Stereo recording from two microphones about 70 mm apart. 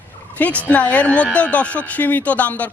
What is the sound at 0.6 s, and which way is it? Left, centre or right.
Speech, left.